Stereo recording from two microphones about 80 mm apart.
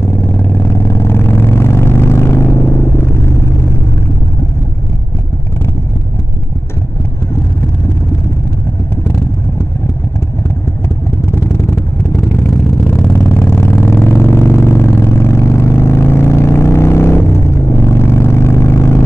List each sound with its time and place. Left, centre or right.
0.0 s vehicle: left
11.3 s vehicle: left
12.9 s vehicle: left